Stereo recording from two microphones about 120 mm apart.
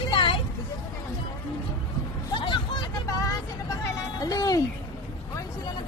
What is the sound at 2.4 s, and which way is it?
Vehicle, 40° left (ahead or behind).